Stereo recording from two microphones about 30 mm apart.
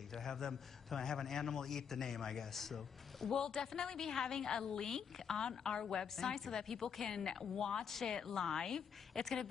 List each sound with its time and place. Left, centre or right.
0.1 s a man's voice: centre
3.3 s a woman's voice: left
7.8 s a man's voice: centre